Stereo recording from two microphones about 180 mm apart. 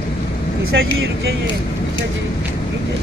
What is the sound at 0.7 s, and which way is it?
Speech, 80° right.